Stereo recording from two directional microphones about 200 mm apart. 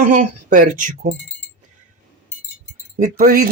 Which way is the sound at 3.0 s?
45° right (ahead or behind).